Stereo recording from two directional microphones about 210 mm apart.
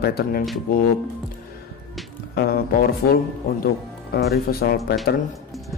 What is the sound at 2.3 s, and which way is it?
Speech, 45° left (ahead or behind).